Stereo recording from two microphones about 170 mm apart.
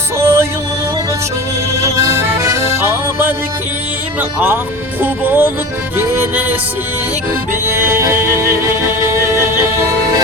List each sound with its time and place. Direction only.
0.2 s music: 15° right (ahead or behind)
1.8 s music: 20° right (ahead or behind)
4.2 s speech: 10° right (ahead or behind)
7.7 s speech: 15° right (ahead or behind)
9.0 s music: 15° right (ahead or behind)